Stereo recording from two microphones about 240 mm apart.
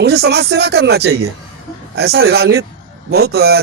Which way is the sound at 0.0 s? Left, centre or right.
Right.